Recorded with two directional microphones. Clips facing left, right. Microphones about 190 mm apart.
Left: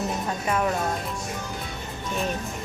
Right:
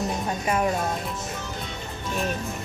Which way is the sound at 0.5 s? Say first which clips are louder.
Right 1 dB; 15° right (ahead or behind).